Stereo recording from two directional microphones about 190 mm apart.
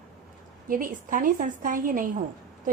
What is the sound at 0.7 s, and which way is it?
A woman's voice, 45° right (ahead or behind).